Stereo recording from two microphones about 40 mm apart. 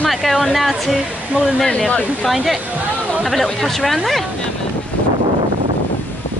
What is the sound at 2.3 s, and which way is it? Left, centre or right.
Speech, centre.